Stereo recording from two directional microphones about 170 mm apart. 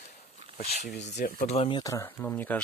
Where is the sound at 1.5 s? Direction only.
30° left (ahead or behind); by 2.6 s 10° left (ahead or behind).